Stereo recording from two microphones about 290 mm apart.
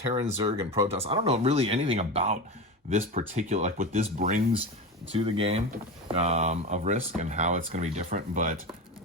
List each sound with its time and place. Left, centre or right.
0.1 s speech: right